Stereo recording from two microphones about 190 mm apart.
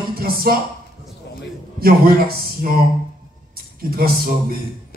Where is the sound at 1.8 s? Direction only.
50° right (ahead or behind).